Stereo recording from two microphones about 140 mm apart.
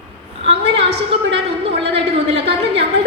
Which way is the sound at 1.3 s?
40° right (ahead or behind).